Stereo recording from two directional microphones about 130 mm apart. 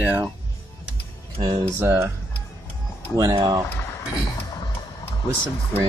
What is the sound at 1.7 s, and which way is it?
Speech, 15° right (ahead or behind).